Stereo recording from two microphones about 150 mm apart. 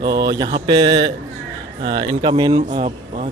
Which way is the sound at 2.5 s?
55° right (ahead or behind).